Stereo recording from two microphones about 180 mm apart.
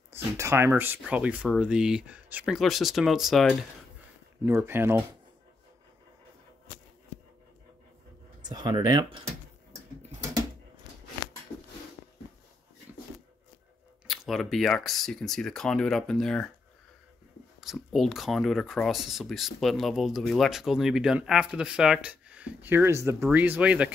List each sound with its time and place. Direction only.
0.1 s speech: 15° right (ahead or behind)
4.5 s speech: 10° right (ahead or behind)
8.4 s speech: 20° right (ahead or behind)
14.0 s speech: centre (ahead or behind)
17.6 s speech: centre (ahead or behind)